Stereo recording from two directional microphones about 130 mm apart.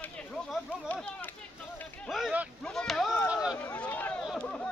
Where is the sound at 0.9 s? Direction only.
15° left (ahead or behind).